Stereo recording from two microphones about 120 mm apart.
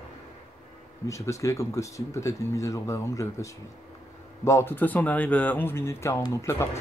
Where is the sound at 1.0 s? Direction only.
25° left (ahead or behind).